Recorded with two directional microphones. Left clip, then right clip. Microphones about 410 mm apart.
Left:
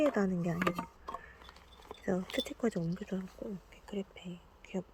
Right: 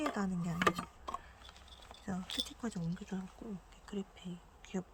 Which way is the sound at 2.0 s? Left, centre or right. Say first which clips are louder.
Left 5 dB; centre.